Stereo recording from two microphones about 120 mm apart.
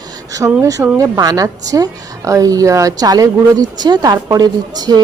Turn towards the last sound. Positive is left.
turn(degrees=-35)  # may be behind; listen again after turning